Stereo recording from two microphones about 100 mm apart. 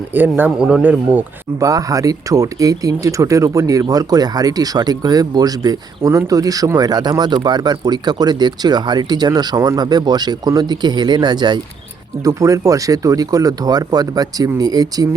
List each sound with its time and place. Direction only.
0.1 s speech: 20° right (ahead or behind)
1.5 s speech: 35° right (ahead or behind)
12.2 s speech: 35° right (ahead or behind)